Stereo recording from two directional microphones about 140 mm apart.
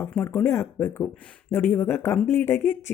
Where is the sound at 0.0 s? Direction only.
15° left (ahead or behind).